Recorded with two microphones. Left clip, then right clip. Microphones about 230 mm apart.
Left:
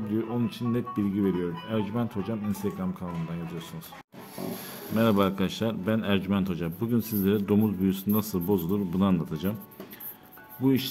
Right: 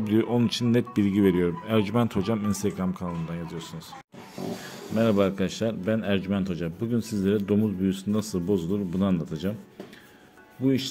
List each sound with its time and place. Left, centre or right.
0.1 s speech: right
4.9 s a man's voice: centre
10.6 s a man's voice: centre